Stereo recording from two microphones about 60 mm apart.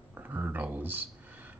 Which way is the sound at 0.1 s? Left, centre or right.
Right.